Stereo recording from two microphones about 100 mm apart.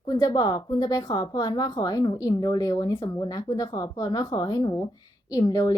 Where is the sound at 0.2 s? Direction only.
45° left (ahead or behind).